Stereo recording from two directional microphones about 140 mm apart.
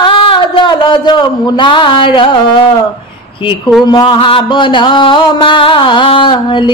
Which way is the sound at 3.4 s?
35° left (ahead or behind).